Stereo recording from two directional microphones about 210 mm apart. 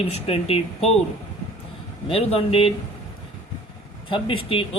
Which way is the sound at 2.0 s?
25° left (ahead or behind).